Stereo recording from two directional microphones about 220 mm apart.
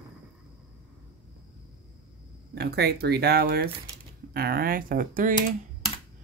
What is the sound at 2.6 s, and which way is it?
Speech, 50° right (ahead or behind).